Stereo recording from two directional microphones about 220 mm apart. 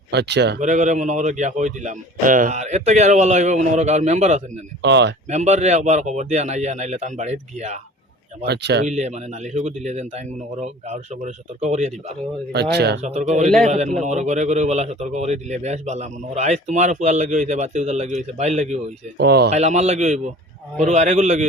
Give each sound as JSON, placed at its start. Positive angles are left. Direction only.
{"t": 0.1, "sound": "speech", "side_deg": -50}
{"t": 0.6, "sound": "a man's voice", "side_deg": -35}
{"t": 4.8, "sound": "speech", "side_deg": -50}
{"t": 5.3, "sound": "a man's voice", "side_deg": -30}
{"t": 8.4, "sound": "speech", "side_deg": -50}
{"t": 8.9, "sound": "a man's voice", "side_deg": -30}
{"t": 12.5, "sound": "speech", "side_deg": -50}
{"t": 13.0, "sound": "a man's voice", "side_deg": -30}
{"t": 19.1, "sound": "speech", "side_deg": -45}
{"t": 19.5, "sound": "a man's voice", "side_deg": -30}